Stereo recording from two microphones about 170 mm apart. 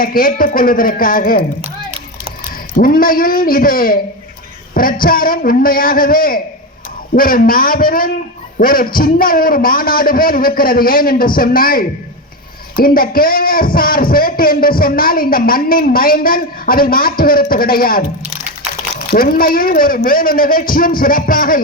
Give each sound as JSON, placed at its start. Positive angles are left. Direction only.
{"t": 0.0, "sound": "a man's voice", "side_deg": 55}
{"t": 2.7, "sound": "a man's voice", "side_deg": 55}
{"t": 19.1, "sound": "a man's voice", "side_deg": 60}